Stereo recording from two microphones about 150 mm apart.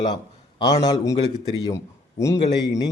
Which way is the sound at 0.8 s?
25° left (ahead or behind).